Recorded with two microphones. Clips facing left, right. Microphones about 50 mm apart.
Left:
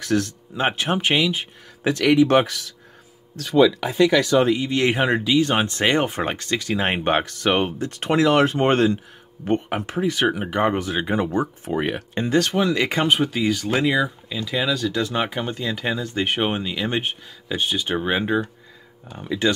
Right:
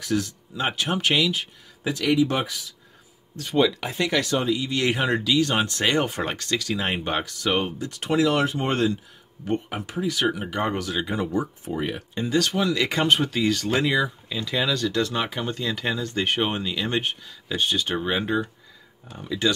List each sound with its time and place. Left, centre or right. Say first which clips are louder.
0.0 s speech: left 4 dB; left
0.6 s speech: left 4 dB; left
1.8 s speech: left 5 dB; left
3.4 s speech: left 2 dB; left
4.5 s speech: left 4 dB; left
10.3 s speech: left 5 dB; left
11.3 s speech: left 4 dB; left
12.4 s speech: left 3 dB; left
13.0 s speech: even; centre; by 19.5 s left